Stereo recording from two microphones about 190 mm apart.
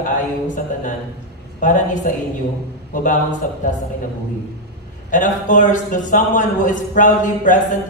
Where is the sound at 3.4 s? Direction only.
45° left (ahead or behind).